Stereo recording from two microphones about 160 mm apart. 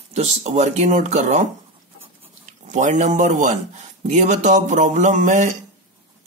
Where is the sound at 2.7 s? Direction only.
50° right (ahead or behind).